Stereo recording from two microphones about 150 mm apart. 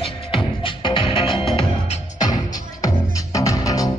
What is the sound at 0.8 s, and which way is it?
Music, 35° left (ahead or behind).